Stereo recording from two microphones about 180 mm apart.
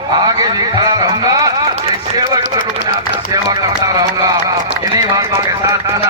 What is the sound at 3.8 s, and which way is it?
A man's voice, 20° right (ahead or behind).